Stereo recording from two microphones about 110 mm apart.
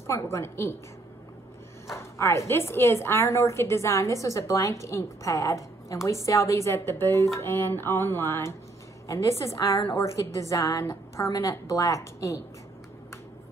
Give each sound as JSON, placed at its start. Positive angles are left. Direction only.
{"t": 0.0, "sound": "a woman's voice", "side_deg": 25}
{"t": 1.9, "sound": "a woman's voice", "side_deg": 25}